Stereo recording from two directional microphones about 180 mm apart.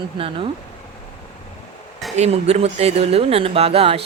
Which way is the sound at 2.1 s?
35° right (ahead or behind).